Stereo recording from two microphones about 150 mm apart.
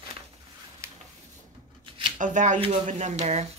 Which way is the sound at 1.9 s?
35° right (ahead or behind).